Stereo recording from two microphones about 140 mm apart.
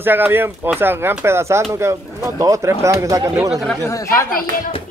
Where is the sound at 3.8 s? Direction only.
20° left (ahead or behind).